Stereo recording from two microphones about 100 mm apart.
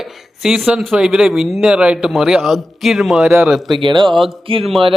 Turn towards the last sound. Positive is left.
turn(degrees=-65)  # may be behind; listen again after turning